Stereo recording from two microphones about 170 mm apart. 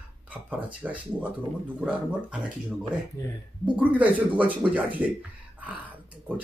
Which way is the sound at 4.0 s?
10° right (ahead or behind).